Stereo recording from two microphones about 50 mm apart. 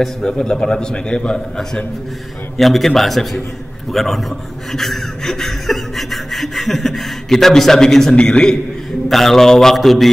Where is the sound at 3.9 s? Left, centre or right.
Centre.